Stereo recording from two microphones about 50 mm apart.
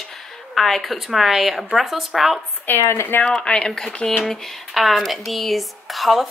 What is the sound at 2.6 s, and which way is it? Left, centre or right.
Speech, left.